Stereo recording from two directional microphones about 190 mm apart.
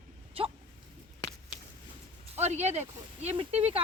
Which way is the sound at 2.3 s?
35° right (ahead or behind).